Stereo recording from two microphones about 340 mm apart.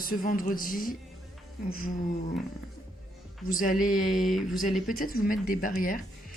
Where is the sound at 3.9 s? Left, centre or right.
Centre.